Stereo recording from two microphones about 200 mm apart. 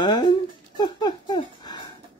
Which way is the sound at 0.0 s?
20° left (ahead or behind).